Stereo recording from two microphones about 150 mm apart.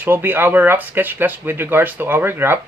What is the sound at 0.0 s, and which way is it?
Speech, 15° right (ahead or behind).